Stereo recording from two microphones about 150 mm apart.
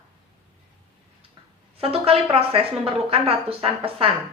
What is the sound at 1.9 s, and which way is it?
A woman's voice, 40° right (ahead or behind).